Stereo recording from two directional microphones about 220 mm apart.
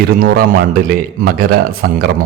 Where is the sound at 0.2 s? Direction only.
40° right (ahead or behind).